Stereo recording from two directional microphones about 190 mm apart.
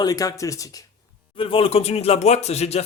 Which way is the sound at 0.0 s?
20° left (ahead or behind).